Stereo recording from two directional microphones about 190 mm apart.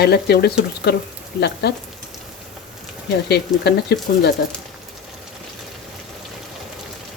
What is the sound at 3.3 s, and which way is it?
Speech, 60° left (ahead or behind).